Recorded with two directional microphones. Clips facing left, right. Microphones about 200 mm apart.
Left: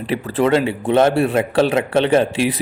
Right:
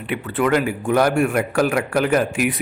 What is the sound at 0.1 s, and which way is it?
A man's voice, 35° left (ahead or behind).